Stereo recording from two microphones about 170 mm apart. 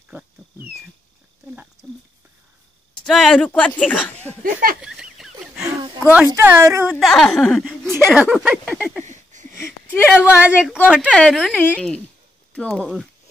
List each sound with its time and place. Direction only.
3.1 s speech: centre (ahead or behind)
4.4 s a sound: 55° right (ahead or behind)
4.8 s fowl: 5° right (ahead or behind)
6.2 s a woman's voice: 15° right (ahead or behind)
6.9 s a woman's voice: centre (ahead or behind)
9.0 s a sound: 45° right (ahead or behind)
10.2 s a woman's voice: 10° right (ahead or behind)
11.7 s a woman's voice: 5° left (ahead or behind)